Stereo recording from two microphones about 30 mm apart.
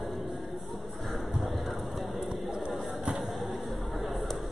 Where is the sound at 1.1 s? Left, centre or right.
Centre.